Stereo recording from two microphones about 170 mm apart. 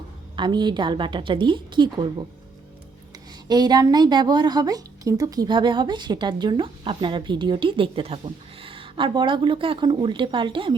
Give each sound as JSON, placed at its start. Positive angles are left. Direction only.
{"t": 0.3, "sound": "a woman's voice", "side_deg": -25}
{"t": 3.5, "sound": "a woman's voice", "side_deg": -25}